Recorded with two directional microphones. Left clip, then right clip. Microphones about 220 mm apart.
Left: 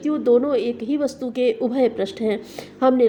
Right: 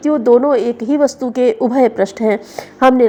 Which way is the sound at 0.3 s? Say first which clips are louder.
Right 6 dB; 25° right (ahead or behind).